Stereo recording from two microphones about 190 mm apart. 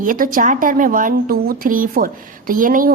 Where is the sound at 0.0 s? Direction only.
45° right (ahead or behind).